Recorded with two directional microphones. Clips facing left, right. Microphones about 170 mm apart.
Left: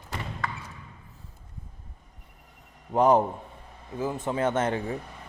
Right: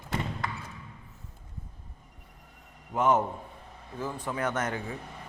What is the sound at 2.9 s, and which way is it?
Speech, 35° left (ahead or behind).